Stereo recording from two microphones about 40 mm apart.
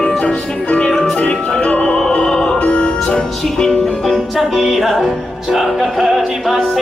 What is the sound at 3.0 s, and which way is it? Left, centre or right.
Music, left.